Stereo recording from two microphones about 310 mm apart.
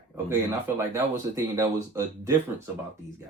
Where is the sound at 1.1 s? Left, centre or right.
Centre.